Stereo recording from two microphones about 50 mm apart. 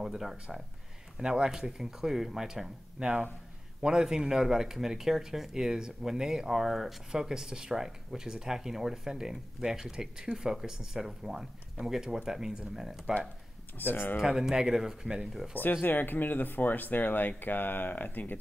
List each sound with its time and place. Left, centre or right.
0.0 s speech: centre
13.7 s speech: left
14.2 s speech: centre
15.8 s speech: left